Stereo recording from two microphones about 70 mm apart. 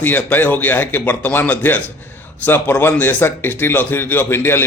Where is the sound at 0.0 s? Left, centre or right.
Left.